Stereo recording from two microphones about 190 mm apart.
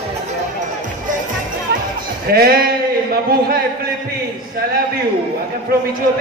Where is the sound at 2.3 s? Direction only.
55° right (ahead or behind).